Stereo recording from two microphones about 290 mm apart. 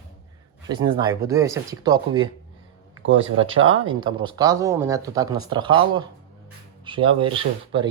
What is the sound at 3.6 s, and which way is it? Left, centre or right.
Speech, right.